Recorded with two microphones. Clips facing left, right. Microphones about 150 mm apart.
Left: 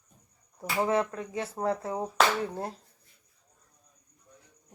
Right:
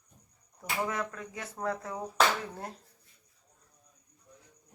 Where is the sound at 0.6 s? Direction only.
30° left (ahead or behind).